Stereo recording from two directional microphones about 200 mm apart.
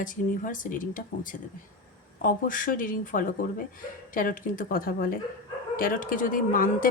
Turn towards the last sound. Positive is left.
turn(degrees=45)  # may be behind; listen again after turning